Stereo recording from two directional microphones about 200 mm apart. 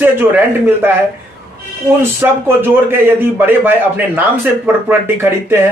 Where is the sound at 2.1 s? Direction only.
10° right (ahead or behind).